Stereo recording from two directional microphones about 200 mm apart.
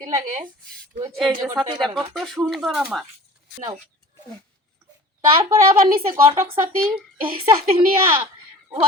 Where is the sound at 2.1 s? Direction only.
Centre (ahead or behind).